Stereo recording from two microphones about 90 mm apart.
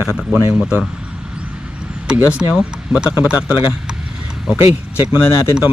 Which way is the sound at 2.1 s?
10° right (ahead or behind).